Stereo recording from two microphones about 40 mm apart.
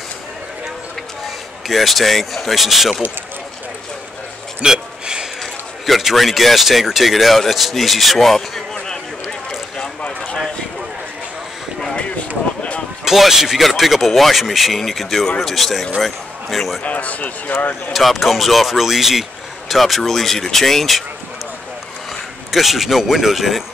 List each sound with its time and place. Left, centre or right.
1.7 s speech: centre
4.6 s a sound: centre
5.9 s speech: centre
8.7 s a sound: centre
13.0 s speech: centre
16.8 s speech: left
17.9 s speech: centre
22.5 s speech: centre